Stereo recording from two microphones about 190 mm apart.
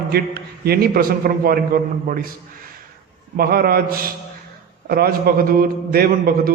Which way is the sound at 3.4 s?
50° right (ahead or behind).